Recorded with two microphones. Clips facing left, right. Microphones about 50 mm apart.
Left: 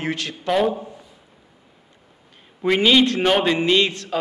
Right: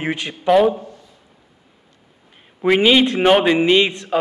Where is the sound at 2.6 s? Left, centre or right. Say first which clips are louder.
Right 2 dB; centre.